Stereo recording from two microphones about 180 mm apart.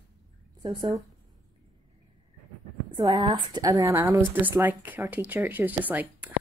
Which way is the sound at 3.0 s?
25° right (ahead or behind).